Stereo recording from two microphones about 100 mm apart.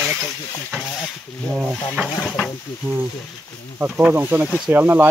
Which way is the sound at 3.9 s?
5° right (ahead or behind).